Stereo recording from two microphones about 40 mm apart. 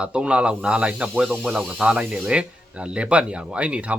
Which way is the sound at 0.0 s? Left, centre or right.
Right.